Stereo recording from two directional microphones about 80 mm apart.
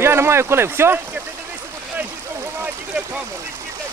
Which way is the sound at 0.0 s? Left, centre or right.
Right.